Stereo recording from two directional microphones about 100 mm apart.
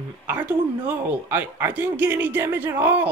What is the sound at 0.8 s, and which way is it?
Speech, 20° right (ahead or behind).